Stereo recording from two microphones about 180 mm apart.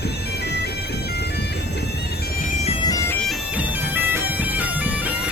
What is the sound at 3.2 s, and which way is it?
Bagpipes, 10° right (ahead or behind).